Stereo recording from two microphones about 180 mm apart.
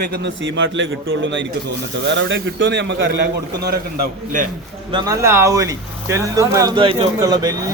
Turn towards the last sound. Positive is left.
turn(degrees=-20)  # may be behind; listen again after turning